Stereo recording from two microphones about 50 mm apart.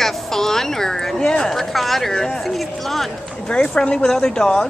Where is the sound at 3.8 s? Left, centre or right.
Centre.